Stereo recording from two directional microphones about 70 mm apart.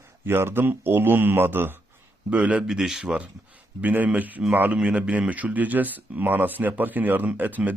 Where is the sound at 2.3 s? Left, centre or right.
Centre.